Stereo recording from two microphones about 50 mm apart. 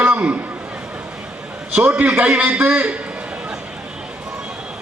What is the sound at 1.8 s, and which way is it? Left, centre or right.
A man's voice, right.